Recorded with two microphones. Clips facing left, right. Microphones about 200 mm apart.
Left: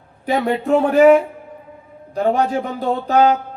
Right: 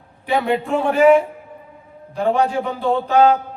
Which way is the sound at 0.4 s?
40° left (ahead or behind).